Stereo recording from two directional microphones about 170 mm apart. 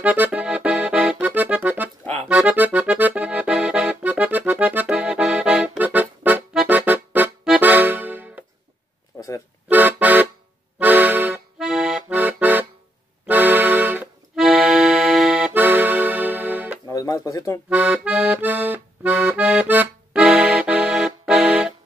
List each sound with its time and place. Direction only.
0.0 s accordion: 10° right (ahead or behind)
9.1 s music: 15° left (ahead or behind)
9.7 s music: 10° right (ahead or behind)
10.8 s accordion: 10° right (ahead or behind)
16.9 s music: 20° left (ahead or behind)
17.6 s accordion: 10° right (ahead or behind)